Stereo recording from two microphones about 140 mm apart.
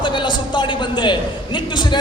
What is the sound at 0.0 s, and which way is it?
A man's voice, 35° left (ahead or behind).